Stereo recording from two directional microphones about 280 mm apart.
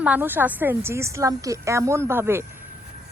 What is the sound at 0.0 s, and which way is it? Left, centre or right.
Speech, centre.